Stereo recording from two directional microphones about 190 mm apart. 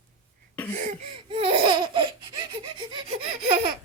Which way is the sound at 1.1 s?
30° right (ahead or behind).